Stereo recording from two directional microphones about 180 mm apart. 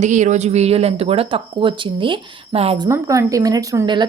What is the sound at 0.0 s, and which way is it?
Speech, 40° right (ahead or behind).